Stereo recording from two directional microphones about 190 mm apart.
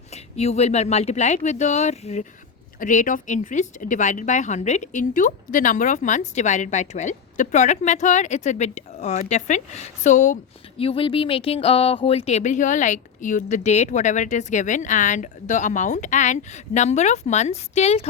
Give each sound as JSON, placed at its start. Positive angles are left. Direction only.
{"t": 0.1, "sound": "speech", "side_deg": 35}
{"t": 10.8, "sound": "speech", "side_deg": 30}